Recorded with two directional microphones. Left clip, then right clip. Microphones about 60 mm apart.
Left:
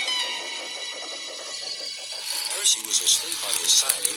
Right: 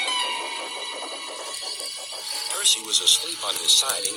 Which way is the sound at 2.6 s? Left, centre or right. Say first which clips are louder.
Right 3 dB; right.